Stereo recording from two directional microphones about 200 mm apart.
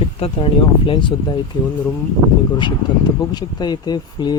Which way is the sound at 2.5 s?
20° left (ahead or behind).